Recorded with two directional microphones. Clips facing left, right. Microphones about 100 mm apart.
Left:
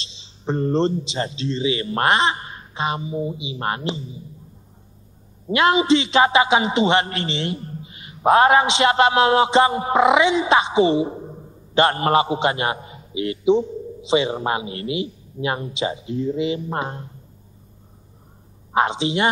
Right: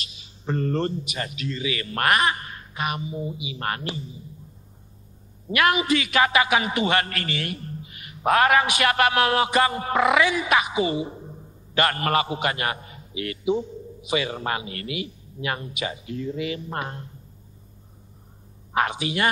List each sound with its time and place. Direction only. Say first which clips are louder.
0.0 s a man's voice: left 5 dB; 25° left (ahead or behind)
5.5 s a man's voice: left 5 dB; 25° left (ahead or behind)
18.7 s a man's voice: left 5 dB; 25° left (ahead or behind)